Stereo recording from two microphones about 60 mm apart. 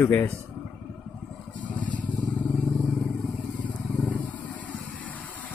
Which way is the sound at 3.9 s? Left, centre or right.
Left.